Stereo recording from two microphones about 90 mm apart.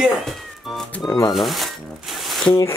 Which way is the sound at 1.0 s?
40° left (ahead or behind).